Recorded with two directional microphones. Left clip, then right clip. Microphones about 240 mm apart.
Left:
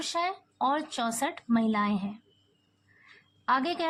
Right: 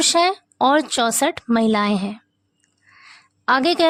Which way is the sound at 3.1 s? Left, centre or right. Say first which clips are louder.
Right 9 dB; right.